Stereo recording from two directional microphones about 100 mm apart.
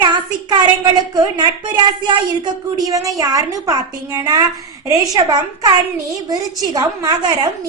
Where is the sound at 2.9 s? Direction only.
35° right (ahead or behind).